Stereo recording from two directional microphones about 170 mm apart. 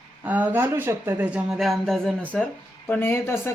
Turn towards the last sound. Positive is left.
turn(degrees=15)  # may be behind; listen again after turning